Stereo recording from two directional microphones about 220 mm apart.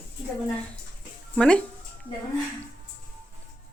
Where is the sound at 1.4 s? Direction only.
5° left (ahead or behind).